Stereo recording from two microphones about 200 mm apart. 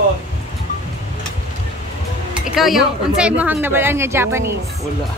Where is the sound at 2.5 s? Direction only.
Centre (ahead or behind).